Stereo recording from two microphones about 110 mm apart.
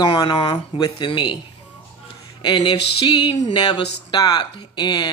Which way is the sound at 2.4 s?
40° left (ahead or behind).